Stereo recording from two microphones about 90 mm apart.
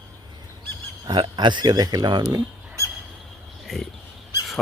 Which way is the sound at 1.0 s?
60° right (ahead or behind).